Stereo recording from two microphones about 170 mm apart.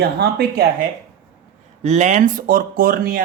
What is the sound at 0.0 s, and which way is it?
Speech, 70° right (ahead or behind).